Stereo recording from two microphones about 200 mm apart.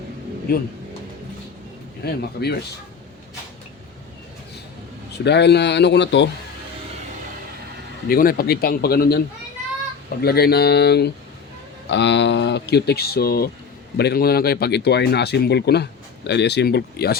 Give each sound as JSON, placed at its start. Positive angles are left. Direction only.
{"t": 0.5, "sound": "a man's voice", "side_deg": 50}
{"t": 2.0, "sound": "speech", "side_deg": 55}
{"t": 5.1, "sound": "speech", "side_deg": 60}
{"t": 8.0, "sound": "a man's voice", "side_deg": 50}